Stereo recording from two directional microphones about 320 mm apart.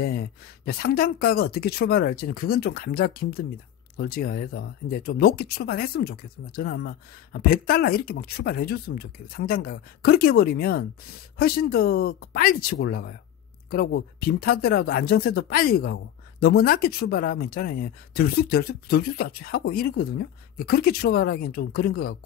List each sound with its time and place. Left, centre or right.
0.0 s speech: left